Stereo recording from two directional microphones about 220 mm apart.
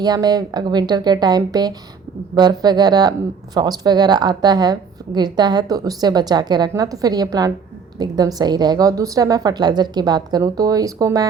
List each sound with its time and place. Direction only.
0.0 s a woman's voice: 20° right (ahead or behind)